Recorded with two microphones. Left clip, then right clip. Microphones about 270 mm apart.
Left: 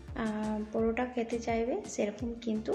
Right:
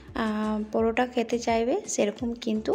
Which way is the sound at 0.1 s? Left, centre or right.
Right.